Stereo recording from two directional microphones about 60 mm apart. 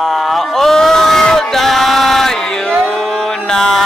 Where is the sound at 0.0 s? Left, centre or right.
Centre.